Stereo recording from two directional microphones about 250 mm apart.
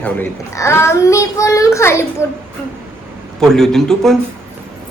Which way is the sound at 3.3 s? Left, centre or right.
Centre.